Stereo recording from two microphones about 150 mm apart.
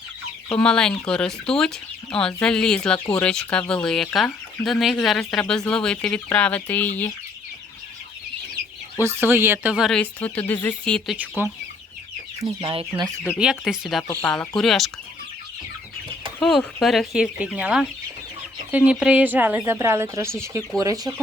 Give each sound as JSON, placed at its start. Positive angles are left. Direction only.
{"t": 0.5, "sound": "speech", "side_deg": 5}
{"t": 9.0, "sound": "speech", "side_deg": -15}
{"t": 9.9, "sound": "speech", "side_deg": 10}
{"t": 11.2, "sound": "speech", "side_deg": -10}
{"t": 12.4, "sound": "speech", "side_deg": -25}
{"t": 12.6, "sound": "speech", "side_deg": -40}
{"t": 13.3, "sound": "speech", "side_deg": -5}
{"t": 14.1, "sound": "speech", "side_deg": 10}
{"t": 16.4, "sound": "speech", "side_deg": 0}